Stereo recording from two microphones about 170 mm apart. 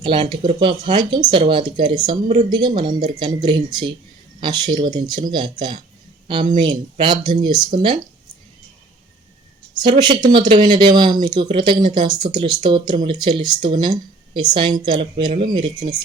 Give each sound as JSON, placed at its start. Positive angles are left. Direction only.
{"t": 0.0, "sound": "speech", "side_deg": -25}
{"t": 6.9, "sound": "speech", "side_deg": -25}
{"t": 10.0, "sound": "speech", "side_deg": -25}